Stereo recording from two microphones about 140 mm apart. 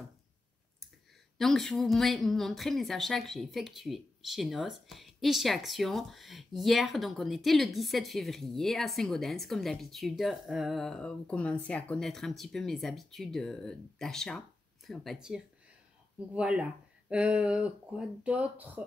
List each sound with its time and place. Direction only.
1.4 s speech: centre (ahead or behind)